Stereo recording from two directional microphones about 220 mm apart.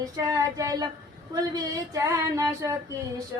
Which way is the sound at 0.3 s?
15° right (ahead or behind).